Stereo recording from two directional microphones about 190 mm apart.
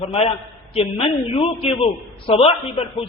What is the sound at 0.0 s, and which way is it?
A woman's voice, 30° left (ahead or behind).